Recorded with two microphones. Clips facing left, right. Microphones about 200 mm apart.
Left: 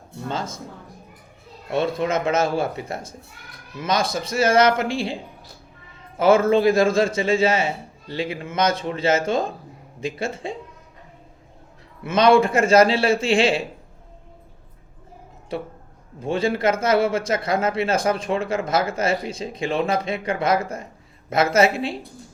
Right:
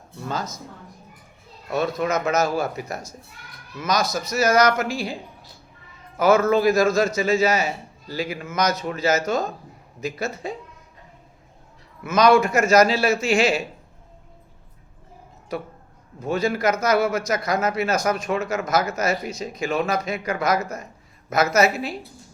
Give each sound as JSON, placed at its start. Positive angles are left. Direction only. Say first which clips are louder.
{"t": 0.3, "sound": "a man's voice", "louder": "left 1 dB", "side_deg": 25}
{"t": 1.7, "sound": "a man's voice", "louder": "left 1 dB", "side_deg": 30}
{"t": 12.0, "sound": "a man's voice", "louder": "left 1 dB", "side_deg": 30}
{"t": 15.5, "sound": "a man's voice", "louder": "left 1 dB", "side_deg": 30}